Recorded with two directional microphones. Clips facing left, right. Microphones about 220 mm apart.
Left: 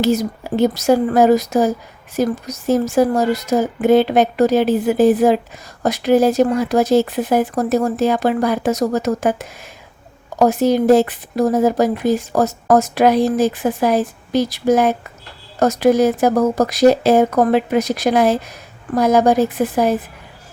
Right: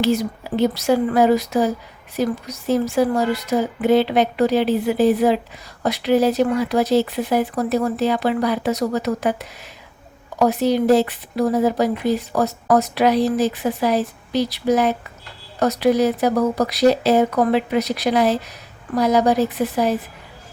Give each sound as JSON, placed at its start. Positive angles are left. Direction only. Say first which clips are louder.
{"t": 0.0, "sound": "speech", "louder": "left 2 dB", "side_deg": 45}